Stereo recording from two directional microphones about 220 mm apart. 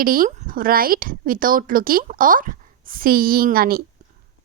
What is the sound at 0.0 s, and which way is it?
Speech, 40° right (ahead or behind).